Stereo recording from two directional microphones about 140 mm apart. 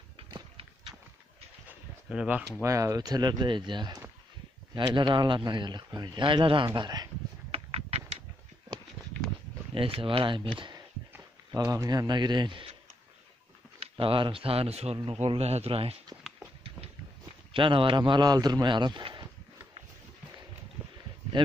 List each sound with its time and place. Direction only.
1.7 s a sound: 10° right (ahead or behind)
2.6 s a man's voice: 20° right (ahead or behind)
7.5 s a sound: 45° right (ahead or behind)
9.8 s a man's voice: 40° right (ahead or behind)
11.5 s a man's voice: 25° right (ahead or behind)
13.7 s speech: 40° right (ahead or behind)
17.5 s a man's voice: 35° right (ahead or behind)